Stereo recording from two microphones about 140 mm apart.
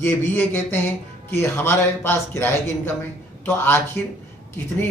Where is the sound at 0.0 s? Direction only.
15° left (ahead or behind).